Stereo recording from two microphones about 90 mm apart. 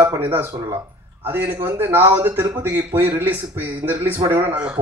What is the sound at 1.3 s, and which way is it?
A man's voice, 25° right (ahead or behind).